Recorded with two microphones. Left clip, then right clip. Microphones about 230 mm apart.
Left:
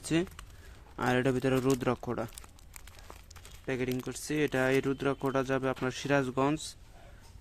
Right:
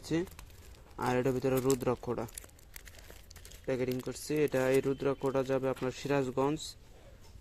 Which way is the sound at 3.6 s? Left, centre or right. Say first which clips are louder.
Even; centre.